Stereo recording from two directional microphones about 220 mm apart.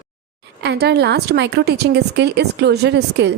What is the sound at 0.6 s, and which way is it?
Speech, 50° right (ahead or behind).